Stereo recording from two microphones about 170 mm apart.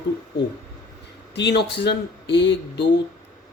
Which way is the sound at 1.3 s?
85° left.